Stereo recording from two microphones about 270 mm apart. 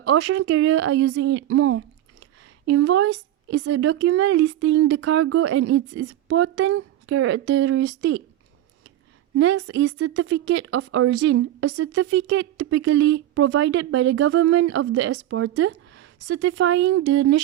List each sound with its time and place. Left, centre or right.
0.0 s a woman's voice: right
9.3 s speech: right